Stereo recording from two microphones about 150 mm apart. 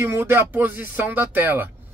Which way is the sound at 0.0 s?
15° right (ahead or behind).